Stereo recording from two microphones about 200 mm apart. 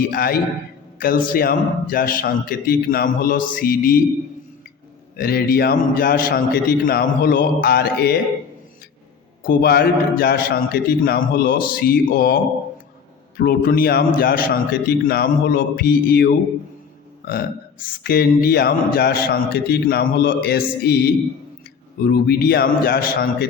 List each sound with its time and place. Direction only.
0.0 s a man's voice: 45° left (ahead or behind)
5.1 s a man's voice: 50° left (ahead or behind)
9.4 s a man's voice: 50° left (ahead or behind)
18.0 s a man's voice: 50° left (ahead or behind)